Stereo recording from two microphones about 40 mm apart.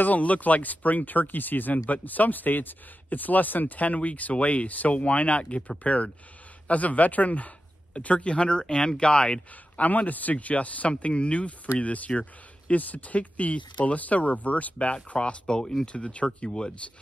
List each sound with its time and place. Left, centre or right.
0.0 s speech: left
6.7 s speech: left
9.8 s speech: left
15.4 s speech: centre
15.9 s speech: left
16.4 s speech: centre